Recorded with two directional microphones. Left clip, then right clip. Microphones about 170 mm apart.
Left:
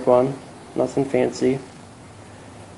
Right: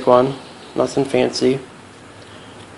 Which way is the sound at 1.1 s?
30° right (ahead or behind).